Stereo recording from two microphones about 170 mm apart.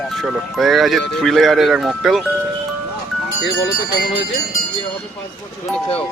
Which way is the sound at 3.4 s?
90° left.